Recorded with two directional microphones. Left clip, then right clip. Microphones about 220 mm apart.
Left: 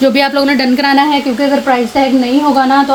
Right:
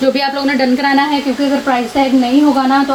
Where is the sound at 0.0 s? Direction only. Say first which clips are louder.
Left 4 dB; 50° left (ahead or behind).